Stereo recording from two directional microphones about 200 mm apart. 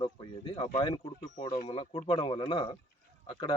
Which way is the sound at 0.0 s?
25° left (ahead or behind).